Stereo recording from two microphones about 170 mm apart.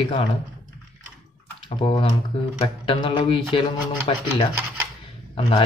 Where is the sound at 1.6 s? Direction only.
30° left (ahead or behind).